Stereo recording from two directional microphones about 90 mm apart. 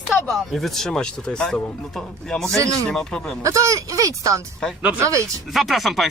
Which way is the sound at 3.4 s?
35° right (ahead or behind).